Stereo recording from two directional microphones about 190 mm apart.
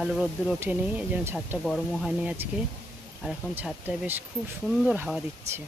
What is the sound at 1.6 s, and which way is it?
Speech, centre (ahead or behind).